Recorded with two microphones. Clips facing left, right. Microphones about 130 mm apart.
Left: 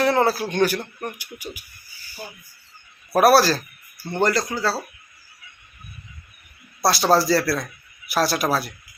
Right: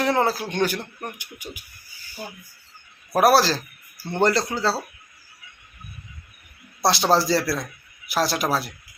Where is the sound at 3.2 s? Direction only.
20° right (ahead or behind).